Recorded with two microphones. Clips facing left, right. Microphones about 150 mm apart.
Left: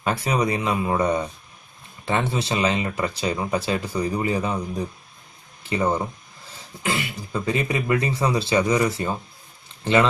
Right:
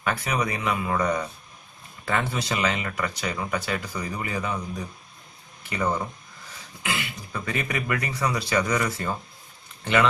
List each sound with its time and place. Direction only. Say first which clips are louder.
0.0 s speech: left 4 dB; 30° left (ahead or behind)